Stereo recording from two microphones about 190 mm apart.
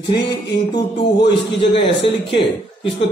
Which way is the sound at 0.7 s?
25° left (ahead or behind).